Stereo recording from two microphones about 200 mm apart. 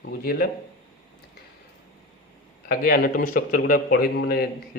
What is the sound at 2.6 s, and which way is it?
A man's voice, 45° left (ahead or behind).